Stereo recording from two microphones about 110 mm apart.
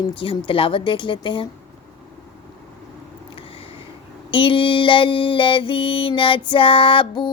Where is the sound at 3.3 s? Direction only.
55° left (ahead or behind).